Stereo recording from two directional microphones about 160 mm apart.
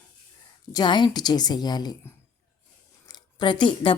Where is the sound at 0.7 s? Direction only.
30° left (ahead or behind).